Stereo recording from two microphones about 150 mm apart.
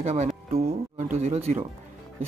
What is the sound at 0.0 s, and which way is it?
Speech, 45° right (ahead or behind).